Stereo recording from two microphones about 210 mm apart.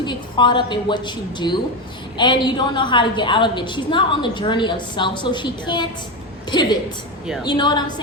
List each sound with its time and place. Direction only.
0.0 s a woman's voice: 20° left (ahead or behind)